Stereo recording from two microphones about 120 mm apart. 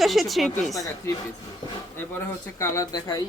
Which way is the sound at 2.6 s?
25° left (ahead or behind).